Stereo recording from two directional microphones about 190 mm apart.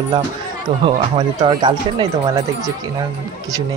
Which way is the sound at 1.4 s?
20° right (ahead or behind).